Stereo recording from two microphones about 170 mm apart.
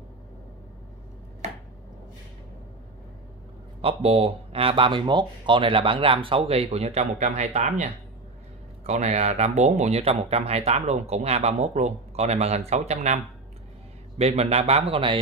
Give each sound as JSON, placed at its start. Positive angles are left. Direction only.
{"t": 3.8, "sound": "speech", "side_deg": -35}